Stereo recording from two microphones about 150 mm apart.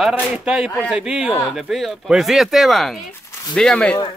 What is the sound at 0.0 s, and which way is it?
Speech, 5° right (ahead or behind).